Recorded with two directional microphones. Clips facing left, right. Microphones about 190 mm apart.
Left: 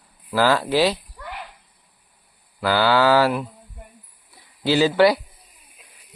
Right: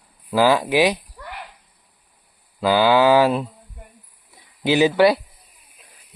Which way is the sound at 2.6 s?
15° right (ahead or behind).